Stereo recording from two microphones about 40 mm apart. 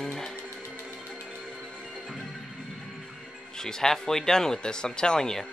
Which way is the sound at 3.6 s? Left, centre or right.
Centre.